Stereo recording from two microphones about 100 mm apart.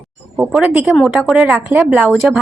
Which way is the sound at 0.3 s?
15° right (ahead or behind).